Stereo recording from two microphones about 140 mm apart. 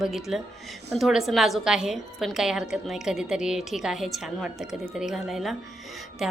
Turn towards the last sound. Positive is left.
turn(degrees=-5)  # may be behind; listen again after turning